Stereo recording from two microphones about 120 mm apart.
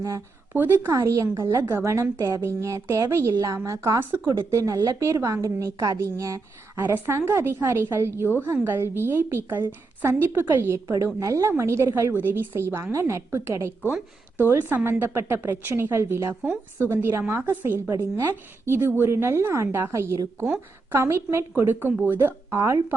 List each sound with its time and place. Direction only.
0.5 s a woman's voice: 15° right (ahead or behind)